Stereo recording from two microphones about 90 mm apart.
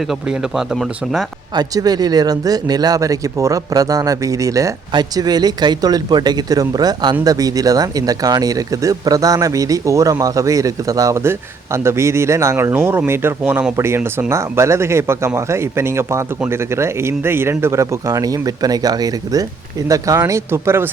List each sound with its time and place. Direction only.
0.0 s speech: 5° right (ahead or behind)
1.5 s speech: 45° right (ahead or behind)
4.9 s speech: 50° right (ahead or behind); by 13.7 s 20° right (ahead or behind)
13.7 s speech: 30° right (ahead or behind)